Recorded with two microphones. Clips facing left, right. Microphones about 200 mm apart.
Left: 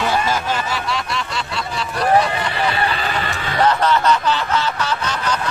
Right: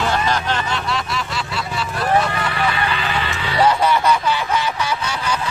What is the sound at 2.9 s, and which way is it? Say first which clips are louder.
Vehicle: even; 40° left (ahead or behind).